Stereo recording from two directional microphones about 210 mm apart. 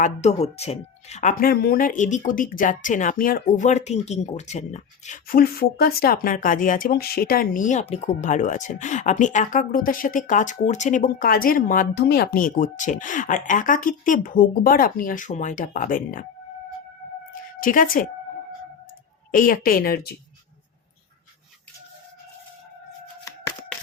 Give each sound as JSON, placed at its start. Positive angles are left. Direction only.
{"t": 0.0, "sound": "speech", "side_deg": 30}
{"t": 17.6, "sound": "speech", "side_deg": 40}
{"t": 19.3, "sound": "a woman's voice", "side_deg": 40}